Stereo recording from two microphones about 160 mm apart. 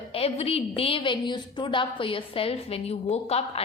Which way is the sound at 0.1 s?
40° left (ahead or behind).